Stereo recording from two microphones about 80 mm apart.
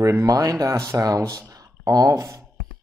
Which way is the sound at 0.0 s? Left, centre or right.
Right.